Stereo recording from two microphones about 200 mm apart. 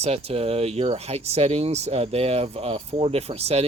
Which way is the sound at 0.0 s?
30° right (ahead or behind).